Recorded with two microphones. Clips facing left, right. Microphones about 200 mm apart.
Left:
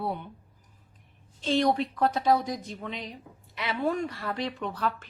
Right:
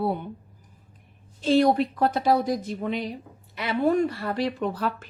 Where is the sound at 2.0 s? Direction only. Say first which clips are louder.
Right 2 dB; 5° right (ahead or behind).